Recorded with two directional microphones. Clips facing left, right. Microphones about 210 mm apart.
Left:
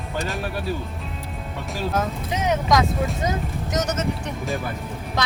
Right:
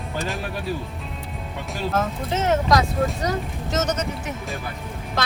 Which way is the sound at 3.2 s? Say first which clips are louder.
Even; 15° left (ahead or behind).